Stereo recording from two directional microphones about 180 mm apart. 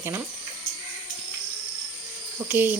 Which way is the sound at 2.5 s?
10° right (ahead or behind).